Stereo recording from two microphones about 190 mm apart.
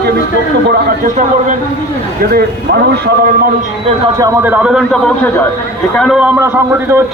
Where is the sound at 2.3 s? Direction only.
60° right (ahead or behind).